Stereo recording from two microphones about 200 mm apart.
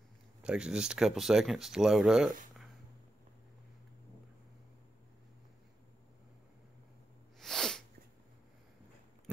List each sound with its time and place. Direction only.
0.4 s speech: 5° right (ahead or behind)
7.3 s sneeze: centre (ahead or behind)